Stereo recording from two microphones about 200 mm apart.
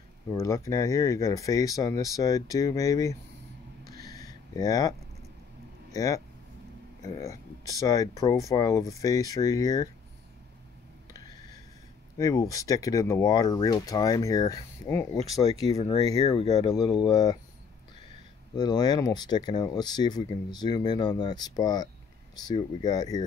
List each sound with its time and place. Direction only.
0.3 s speech: 15° left (ahead or behind)
4.0 s a sound: 20° left (ahead or behind)
5.9 s speech: 15° left (ahead or behind)
12.2 s speech: 15° left (ahead or behind)
15.6 s speech: 30° left (ahead or behind)
18.5 s speech: 20° left (ahead or behind)